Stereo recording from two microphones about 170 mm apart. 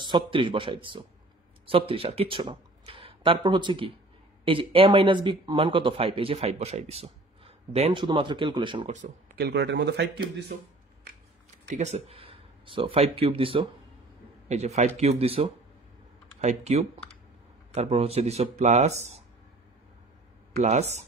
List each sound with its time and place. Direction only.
0.0 s speech: 30° right (ahead or behind)
9.0 s speech: 65° right (ahead or behind); by 10.2 s 80° right
11.7 s speech: 40° right (ahead or behind)
20.5 s speech: 40° right (ahead or behind)